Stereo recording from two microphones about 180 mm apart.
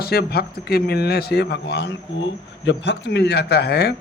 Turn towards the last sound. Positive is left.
turn(degrees=65)  # may be behind; listen again after turning